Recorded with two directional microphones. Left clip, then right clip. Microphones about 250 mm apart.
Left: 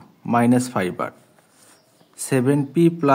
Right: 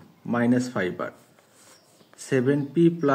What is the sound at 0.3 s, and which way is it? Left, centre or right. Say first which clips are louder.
Speech: left 6 dB; left.